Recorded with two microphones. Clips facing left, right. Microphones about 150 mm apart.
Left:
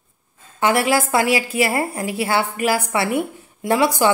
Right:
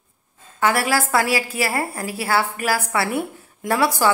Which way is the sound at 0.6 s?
20° left (ahead or behind).